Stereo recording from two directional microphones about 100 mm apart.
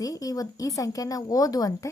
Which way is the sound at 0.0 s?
35° left (ahead or behind).